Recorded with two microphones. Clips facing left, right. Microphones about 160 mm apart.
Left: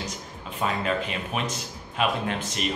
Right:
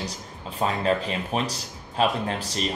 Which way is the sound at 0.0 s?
35° right (ahead or behind).